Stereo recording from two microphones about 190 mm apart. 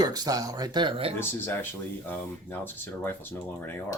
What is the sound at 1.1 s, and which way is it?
Speech, 10° left (ahead or behind).